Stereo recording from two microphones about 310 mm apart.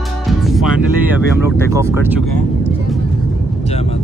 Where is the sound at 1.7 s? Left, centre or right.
Centre.